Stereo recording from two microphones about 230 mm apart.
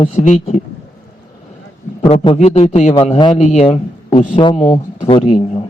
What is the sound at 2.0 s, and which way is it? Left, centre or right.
A man's voice, left.